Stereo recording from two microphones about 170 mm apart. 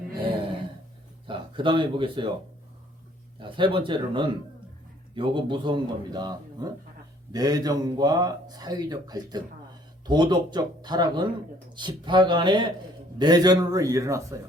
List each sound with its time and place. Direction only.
1.3 s speech: 30° right (ahead or behind)
3.4 s speech: 30° right (ahead or behind)